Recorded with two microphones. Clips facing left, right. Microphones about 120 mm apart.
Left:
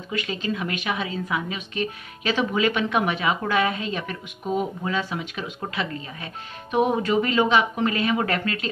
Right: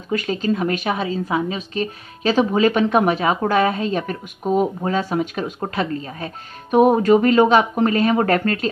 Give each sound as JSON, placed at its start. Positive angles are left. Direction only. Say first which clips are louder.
{"t": 0.1, "sound": "a woman's voice", "louder": "right 7 dB", "side_deg": -40}